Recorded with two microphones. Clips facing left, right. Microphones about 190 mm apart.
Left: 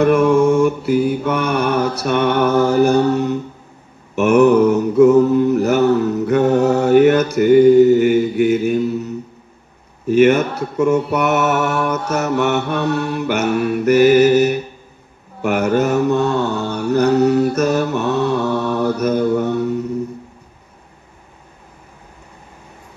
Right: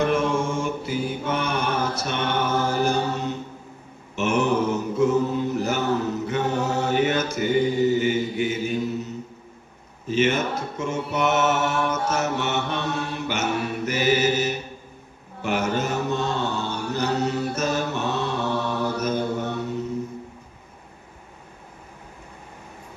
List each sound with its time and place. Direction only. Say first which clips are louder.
0.0 s mantra: left 10 dB; 60° left (ahead or behind)